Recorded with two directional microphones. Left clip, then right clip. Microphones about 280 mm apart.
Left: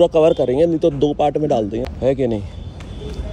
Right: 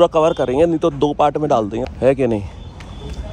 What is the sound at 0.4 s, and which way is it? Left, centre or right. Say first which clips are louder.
Speech: even; right.